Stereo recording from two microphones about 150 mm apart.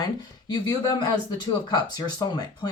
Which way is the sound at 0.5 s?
25° left (ahead or behind).